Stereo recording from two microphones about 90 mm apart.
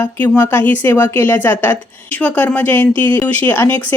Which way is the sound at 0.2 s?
20° left (ahead or behind).